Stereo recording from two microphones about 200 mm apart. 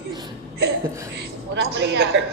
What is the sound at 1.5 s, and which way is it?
Speech, 60° right (ahead or behind).